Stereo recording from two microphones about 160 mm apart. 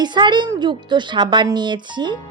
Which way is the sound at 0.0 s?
30° right (ahead or behind).